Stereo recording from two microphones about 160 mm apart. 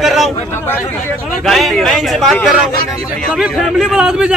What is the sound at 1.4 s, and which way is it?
A man's voice, centre (ahead or behind).